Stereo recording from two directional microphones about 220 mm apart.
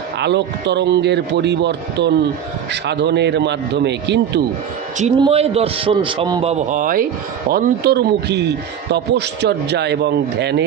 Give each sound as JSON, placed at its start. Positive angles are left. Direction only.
{"t": 0.2, "sound": "a man's voice", "side_deg": -50}
{"t": 5.2, "sound": "a man's voice", "side_deg": -25}
{"t": 6.5, "sound": "a man's voice", "side_deg": -35}